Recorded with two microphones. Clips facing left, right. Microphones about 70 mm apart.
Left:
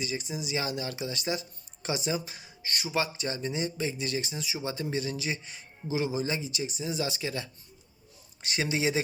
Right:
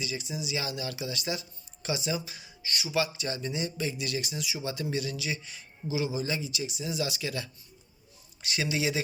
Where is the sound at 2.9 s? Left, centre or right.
Left.